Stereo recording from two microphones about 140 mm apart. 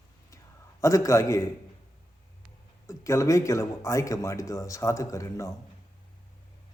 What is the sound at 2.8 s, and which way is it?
Speech, 20° left (ahead or behind).